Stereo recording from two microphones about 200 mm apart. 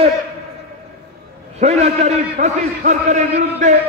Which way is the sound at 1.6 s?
35° right (ahead or behind).